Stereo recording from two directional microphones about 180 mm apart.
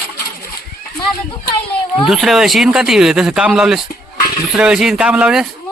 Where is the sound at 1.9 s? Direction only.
Centre (ahead or behind).